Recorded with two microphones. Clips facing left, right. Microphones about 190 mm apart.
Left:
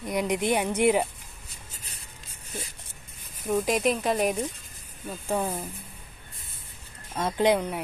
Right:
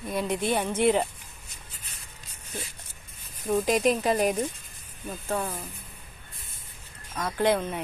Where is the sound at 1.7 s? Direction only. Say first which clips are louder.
Left 2 dB; 35° left (ahead or behind).